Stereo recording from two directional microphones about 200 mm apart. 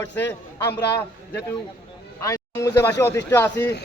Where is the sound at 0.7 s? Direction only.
55° left (ahead or behind).